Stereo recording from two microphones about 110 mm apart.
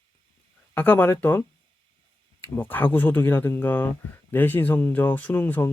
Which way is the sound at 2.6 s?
15° left (ahead or behind).